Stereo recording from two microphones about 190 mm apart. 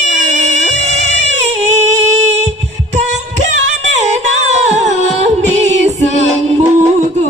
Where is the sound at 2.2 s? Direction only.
35° right (ahead or behind).